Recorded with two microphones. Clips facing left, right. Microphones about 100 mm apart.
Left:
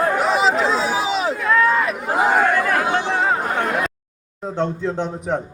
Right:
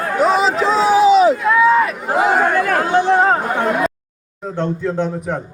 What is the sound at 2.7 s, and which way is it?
Chatter, 40° right (ahead or behind).